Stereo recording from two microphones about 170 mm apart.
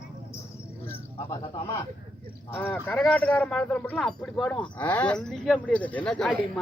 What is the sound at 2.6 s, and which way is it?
A woman's voice, 10° left (ahead or behind).